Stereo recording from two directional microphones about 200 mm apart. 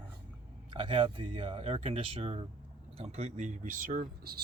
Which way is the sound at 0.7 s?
25° right (ahead or behind).